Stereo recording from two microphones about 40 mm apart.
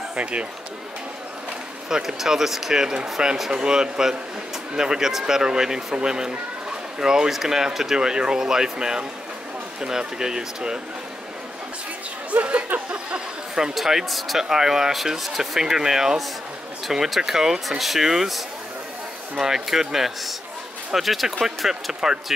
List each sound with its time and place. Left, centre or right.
0.1 s speech: right
1.9 s speech: centre
12.3 s speech: right
12.9 s a sound: right
13.7 s speech: centre
14.4 s speech: centre